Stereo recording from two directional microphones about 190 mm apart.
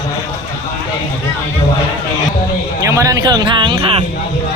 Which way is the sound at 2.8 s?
15° right (ahead or behind).